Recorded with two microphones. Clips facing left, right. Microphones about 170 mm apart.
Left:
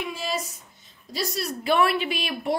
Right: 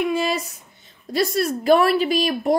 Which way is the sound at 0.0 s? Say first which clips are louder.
Right 9 dB; 60° right (ahead or behind).